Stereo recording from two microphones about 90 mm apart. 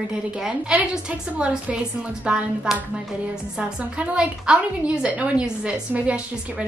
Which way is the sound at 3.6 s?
10° right (ahead or behind).